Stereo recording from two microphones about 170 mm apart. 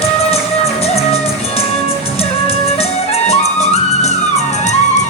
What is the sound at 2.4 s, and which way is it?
Music, 40° left (ahead or behind).